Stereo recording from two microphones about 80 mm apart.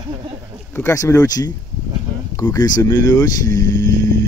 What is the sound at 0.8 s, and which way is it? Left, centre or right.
Speech, left.